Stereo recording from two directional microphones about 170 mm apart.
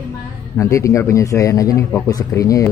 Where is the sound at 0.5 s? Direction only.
20° left (ahead or behind).